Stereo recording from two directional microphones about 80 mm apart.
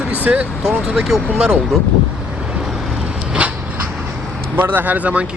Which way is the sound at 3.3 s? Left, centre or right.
Centre.